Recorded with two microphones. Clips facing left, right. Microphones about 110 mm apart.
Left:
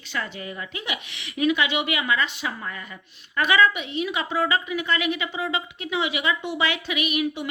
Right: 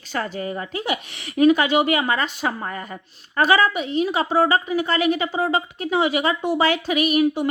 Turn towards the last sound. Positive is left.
turn(degrees=-40)  # may be behind; listen again after turning